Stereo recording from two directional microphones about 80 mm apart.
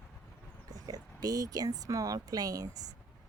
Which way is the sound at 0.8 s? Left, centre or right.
Right.